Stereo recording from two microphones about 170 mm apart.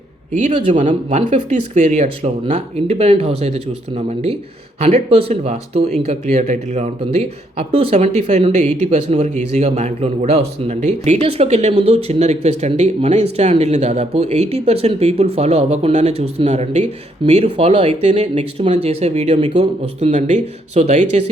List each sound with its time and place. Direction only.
0.3 s speech: 45° right (ahead or behind)